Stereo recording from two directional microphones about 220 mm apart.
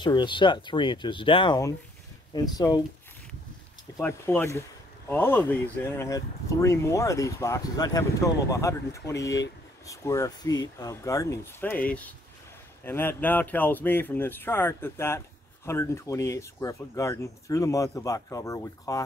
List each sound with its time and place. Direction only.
0.0 s speech: 20° left (ahead or behind)
4.0 s speech: 10° left (ahead or behind)